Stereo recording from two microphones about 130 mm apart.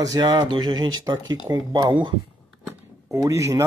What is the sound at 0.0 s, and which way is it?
Speech, 30° right (ahead or behind).